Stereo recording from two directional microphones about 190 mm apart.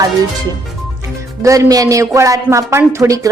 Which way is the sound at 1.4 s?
15° right (ahead or behind).